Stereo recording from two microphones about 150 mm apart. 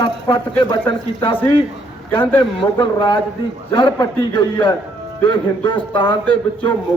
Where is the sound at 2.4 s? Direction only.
35° left (ahead or behind).